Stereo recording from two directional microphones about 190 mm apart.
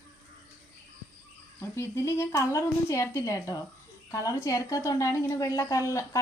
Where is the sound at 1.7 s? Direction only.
15° left (ahead or behind).